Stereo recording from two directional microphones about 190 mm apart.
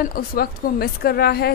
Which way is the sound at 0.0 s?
50° left (ahead or behind).